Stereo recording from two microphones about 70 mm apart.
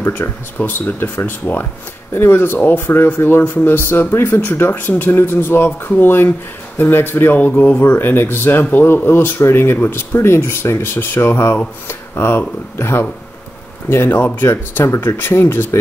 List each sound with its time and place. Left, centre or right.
0.1 s speech: left